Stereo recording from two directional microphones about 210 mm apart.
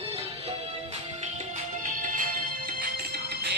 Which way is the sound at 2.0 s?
40° right (ahead or behind).